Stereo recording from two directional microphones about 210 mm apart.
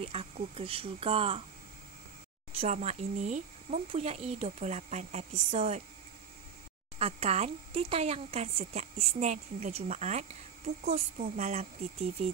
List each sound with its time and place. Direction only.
0.0 s speech: 30° right (ahead or behind)
2.5 s speech: 30° right (ahead or behind)
7.0 s speech: 30° right (ahead or behind)